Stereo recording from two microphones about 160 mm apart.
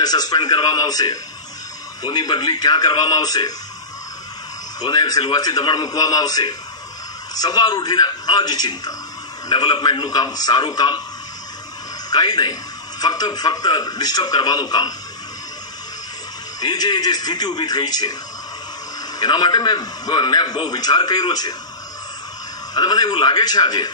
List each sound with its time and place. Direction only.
0.0 s a man's voice: 25° left (ahead or behind)
4.8 s a man's voice: 25° left (ahead or behind)
12.1 s a man's voice: 25° left (ahead or behind)
16.5 s a man's voice: 25° left (ahead or behind)
19.1 s a man's voice: 25° left (ahead or behind)
22.8 s a man's voice: 25° left (ahead or behind)